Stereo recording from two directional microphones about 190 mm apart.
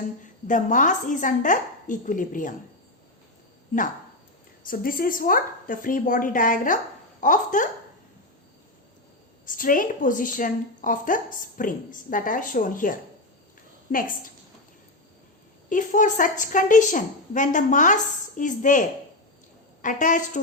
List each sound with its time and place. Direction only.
0.2 s a woman's voice: 40° left (ahead or behind)
4.6 s a woman's voice: 50° left (ahead or behind)
9.5 s a woman's voice: 45° left (ahead or behind)
15.7 s a woman's voice: 45° left (ahead or behind)